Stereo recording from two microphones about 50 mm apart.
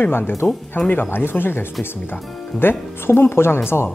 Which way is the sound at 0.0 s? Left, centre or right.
Left.